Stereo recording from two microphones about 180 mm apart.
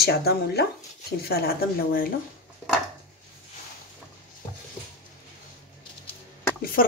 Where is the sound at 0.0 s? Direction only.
60° left (ahead or behind).